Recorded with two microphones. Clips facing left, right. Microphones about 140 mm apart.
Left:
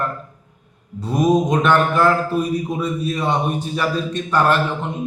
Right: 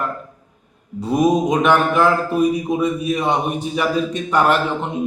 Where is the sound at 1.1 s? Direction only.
10° right (ahead or behind).